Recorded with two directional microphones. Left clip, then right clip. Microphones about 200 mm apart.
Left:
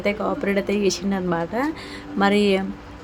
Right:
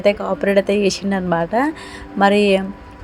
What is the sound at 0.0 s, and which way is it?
A woman's voice, 20° right (ahead or behind).